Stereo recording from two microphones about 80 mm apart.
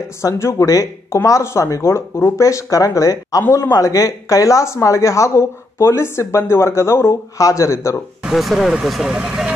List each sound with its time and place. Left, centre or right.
0.2 s speech: left
3.4 s a man's voice: left
3.7 s speech: left
8.2 s speech: centre